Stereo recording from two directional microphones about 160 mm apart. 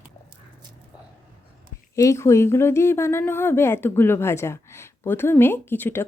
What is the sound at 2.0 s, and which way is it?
Speech, 20° left (ahead or behind).